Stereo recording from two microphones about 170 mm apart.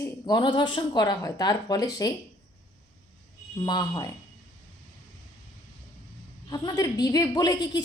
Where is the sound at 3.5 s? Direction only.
25° left (ahead or behind).